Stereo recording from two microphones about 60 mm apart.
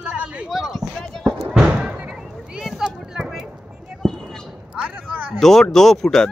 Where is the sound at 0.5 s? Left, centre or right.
Centre.